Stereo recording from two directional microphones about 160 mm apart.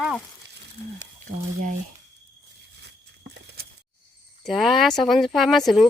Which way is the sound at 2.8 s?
90° right.